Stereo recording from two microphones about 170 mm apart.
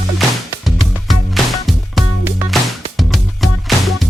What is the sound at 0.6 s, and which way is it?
Music, centre (ahead or behind).